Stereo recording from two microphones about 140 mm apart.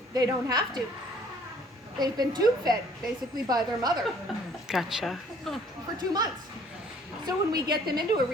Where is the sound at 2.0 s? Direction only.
30° right (ahead or behind).